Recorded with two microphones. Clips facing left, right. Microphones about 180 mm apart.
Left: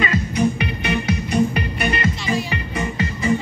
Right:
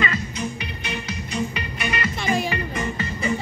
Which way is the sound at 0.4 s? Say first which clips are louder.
Left 10 dB; 60° left (ahead or behind).